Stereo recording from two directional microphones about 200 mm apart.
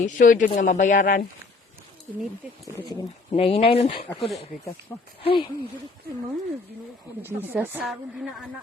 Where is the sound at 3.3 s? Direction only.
30° left (ahead or behind).